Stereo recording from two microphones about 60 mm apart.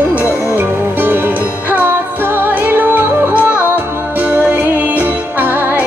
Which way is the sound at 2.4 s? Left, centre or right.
Right.